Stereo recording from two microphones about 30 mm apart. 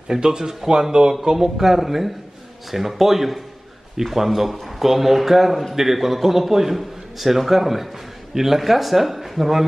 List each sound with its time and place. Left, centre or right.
0.1 s speech: right
0.4 s speech: centre
0.7 s speech: right
1.3 s a man's voice: centre